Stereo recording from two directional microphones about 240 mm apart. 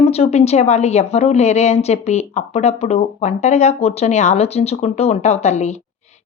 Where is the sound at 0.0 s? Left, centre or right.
Left.